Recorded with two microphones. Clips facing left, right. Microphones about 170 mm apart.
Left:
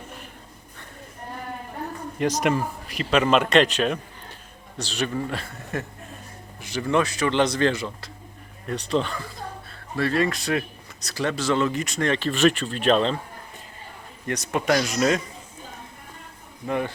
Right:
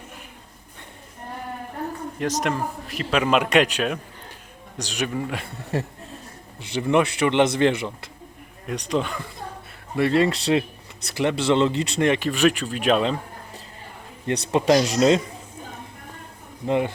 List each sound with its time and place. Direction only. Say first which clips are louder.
2.1 s a man's voice: left 3 dB; centre (ahead or behind)
5.7 s speech: right 4 dB; 30° right (ahead or behind)
8.6 s speech: even; 10° right (ahead or behind)
9.9 s speech: right 3 dB; 20° right (ahead or behind)
12.0 s speech: right 1 dB; 15° right (ahead or behind)
14.3 s speech: right 4 dB; 30° right (ahead or behind)
16.6 s speech: right 4 dB; 20° right (ahead or behind)